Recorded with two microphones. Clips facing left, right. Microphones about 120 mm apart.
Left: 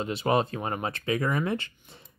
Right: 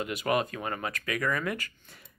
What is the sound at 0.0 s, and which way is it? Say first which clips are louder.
Speech: left 3 dB; 30° left (ahead or behind).